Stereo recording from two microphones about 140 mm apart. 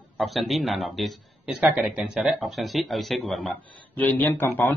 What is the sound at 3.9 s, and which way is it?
Speech, 10° left (ahead or behind).